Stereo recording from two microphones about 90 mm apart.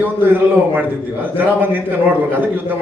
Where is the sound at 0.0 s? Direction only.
25° right (ahead or behind).